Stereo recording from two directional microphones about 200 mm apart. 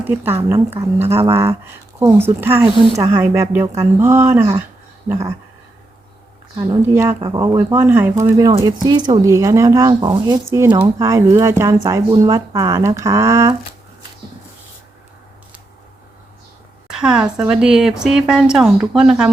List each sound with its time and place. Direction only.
0.1 s speech: 10° right (ahead or behind)
6.7 s speech: 15° right (ahead or behind)
16.9 s a woman's voice: 5° right (ahead or behind)